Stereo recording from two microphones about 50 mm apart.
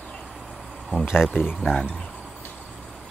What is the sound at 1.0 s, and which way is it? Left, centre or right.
Speech, centre.